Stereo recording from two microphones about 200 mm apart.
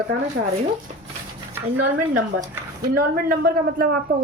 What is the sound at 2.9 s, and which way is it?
A woman's voice, 45° right (ahead or behind).